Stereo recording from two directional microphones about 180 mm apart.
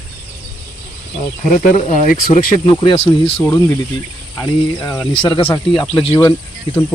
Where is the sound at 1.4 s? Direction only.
45° left (ahead or behind).